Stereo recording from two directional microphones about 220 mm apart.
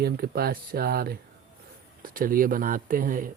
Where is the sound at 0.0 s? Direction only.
45° right (ahead or behind).